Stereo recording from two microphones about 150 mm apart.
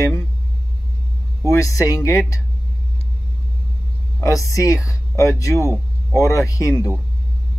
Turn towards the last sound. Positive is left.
turn(degrees=20)  # may be behind; listen again after turning